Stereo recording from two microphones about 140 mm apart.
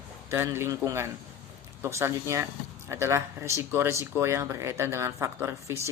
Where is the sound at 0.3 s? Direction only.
20° right (ahead or behind).